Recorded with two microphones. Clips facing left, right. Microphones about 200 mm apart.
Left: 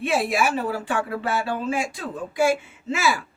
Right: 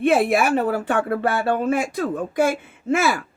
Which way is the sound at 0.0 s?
55° right (ahead or behind).